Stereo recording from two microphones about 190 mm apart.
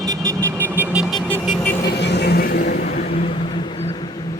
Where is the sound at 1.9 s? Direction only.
60° left (ahead or behind).